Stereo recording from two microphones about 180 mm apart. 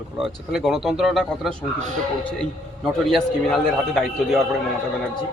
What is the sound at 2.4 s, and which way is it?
Speech, centre (ahead or behind).